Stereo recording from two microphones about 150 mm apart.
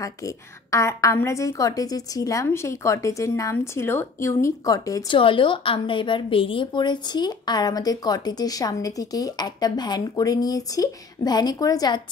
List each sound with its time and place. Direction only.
0.0 s a woman's voice: 20° left (ahead or behind)
5.0 s a woman's voice: 35° left (ahead or behind)